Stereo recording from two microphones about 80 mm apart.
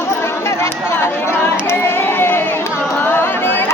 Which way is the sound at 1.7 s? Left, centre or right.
Left.